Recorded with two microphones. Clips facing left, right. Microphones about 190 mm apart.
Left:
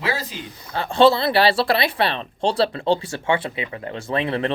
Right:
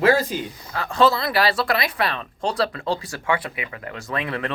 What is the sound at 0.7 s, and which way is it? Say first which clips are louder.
Speech: left 4 dB; 30° left (ahead or behind).